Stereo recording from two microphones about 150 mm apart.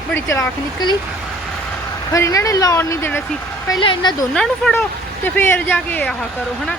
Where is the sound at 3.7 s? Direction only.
30° left (ahead or behind).